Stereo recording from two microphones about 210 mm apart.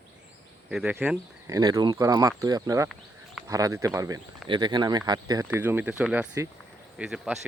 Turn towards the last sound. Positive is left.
turn(degrees=0)  # may be behind; listen again after turning